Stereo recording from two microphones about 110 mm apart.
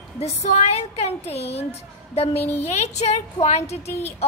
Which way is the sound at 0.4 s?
80° left.